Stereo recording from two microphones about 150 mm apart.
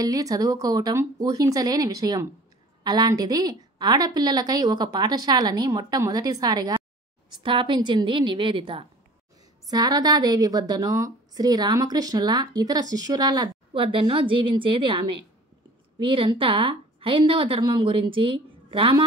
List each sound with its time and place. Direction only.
0.0 s a woman's voice: 25° right (ahead or behind)